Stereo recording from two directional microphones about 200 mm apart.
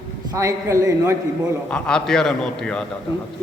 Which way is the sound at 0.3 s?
15° right (ahead or behind).